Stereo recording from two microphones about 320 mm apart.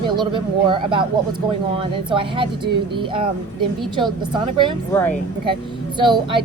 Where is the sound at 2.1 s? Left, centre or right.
Centre.